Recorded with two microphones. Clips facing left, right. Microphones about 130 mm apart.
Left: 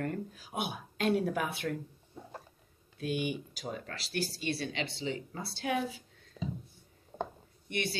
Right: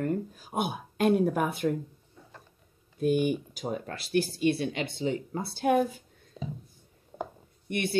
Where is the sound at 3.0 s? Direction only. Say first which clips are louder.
Right 8 dB; 50° right (ahead or behind).